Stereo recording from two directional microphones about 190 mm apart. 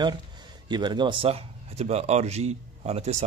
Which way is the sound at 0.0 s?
25° right (ahead or behind).